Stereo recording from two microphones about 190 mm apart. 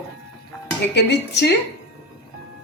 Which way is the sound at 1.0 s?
65° left (ahead or behind).